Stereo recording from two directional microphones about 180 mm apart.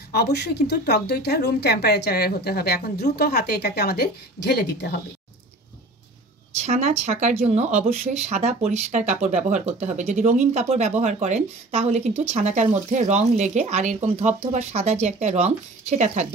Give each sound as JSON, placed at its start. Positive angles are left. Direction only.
{"t": 0.1, "sound": "a woman's voice", "side_deg": 65}
{"t": 6.6, "sound": "speech", "side_deg": -40}